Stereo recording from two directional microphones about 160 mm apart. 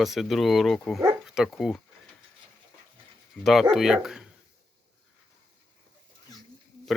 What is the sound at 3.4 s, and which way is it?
Speech, centre (ahead or behind).